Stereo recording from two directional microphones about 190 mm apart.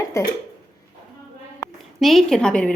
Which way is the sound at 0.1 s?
15° left (ahead or behind).